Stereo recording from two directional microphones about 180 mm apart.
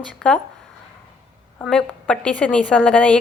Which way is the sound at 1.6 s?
5° left (ahead or behind).